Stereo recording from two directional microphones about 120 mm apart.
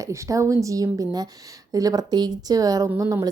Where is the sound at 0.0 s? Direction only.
25° right (ahead or behind).